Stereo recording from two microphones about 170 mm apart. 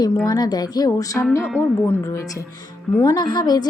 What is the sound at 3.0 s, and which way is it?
Speech, 20° left (ahead or behind).